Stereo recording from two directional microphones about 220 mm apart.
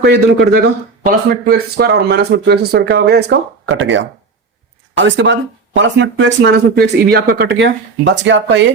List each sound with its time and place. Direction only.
0.0 s speech: 45° right (ahead or behind)